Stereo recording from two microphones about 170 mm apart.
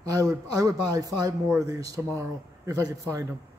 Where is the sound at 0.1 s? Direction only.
20° right (ahead or behind).